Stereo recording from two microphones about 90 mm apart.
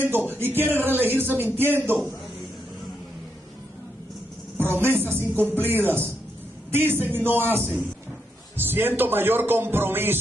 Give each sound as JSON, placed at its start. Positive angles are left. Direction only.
{"t": 0.0, "sound": "a man's voice", "side_deg": -25}
{"t": 4.8, "sound": "a man's voice", "side_deg": -25}